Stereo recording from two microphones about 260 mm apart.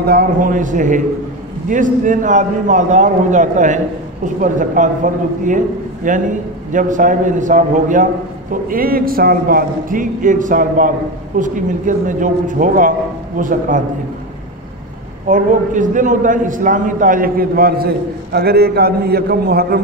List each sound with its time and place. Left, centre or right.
0.0 s a man's voice: right
15.2 s a man's voice: right